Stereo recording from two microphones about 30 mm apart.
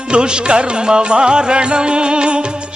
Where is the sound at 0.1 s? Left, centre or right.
Right.